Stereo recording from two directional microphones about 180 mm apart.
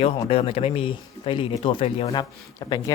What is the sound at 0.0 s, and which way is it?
Speech, 30° left (ahead or behind).